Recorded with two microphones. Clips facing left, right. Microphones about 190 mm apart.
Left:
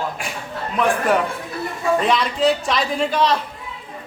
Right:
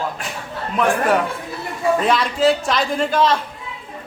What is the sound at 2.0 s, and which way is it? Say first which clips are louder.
A man's voice: right 1 dB; centre (ahead or behind).